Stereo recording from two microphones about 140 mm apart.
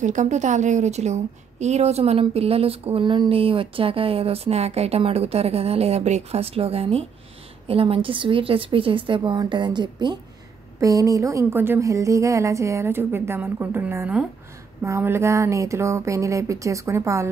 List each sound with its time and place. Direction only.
0.0 s a woman's voice: 60° right (ahead or behind); by 17.3 s 20° right (ahead or behind)